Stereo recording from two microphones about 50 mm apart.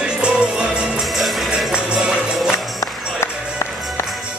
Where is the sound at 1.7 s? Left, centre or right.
Centre.